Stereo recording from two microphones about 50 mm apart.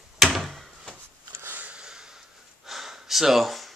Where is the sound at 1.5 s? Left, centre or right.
Right.